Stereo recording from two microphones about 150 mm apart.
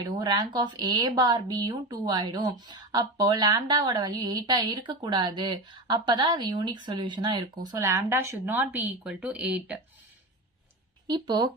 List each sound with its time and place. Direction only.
0.0 s speech: 30° right (ahead or behind); by 9.7 s 10° right (ahead or behind)
11.0 s speech: 25° right (ahead or behind)